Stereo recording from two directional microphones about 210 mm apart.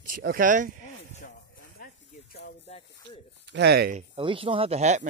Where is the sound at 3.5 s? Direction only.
55° right (ahead or behind).